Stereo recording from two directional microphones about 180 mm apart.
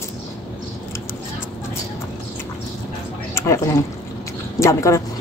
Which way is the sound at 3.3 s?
15° left (ahead or behind).